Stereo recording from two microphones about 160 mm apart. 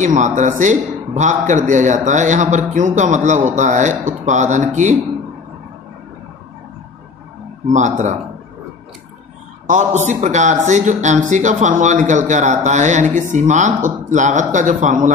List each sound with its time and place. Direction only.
0.0 s speech: 50° right (ahead or behind)
7.6 s speech: 50° right (ahead or behind)
9.7 s speech: 50° right (ahead or behind)